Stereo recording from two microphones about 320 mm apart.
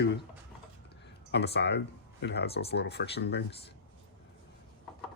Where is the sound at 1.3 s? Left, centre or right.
Left.